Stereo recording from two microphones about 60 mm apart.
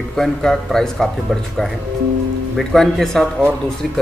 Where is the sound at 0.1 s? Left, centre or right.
Centre.